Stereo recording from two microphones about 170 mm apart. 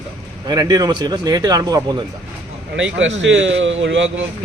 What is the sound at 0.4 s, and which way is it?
A man's voice, 25° right (ahead or behind).